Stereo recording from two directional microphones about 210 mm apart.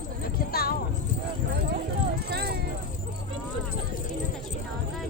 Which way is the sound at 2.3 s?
50° right (ahead or behind).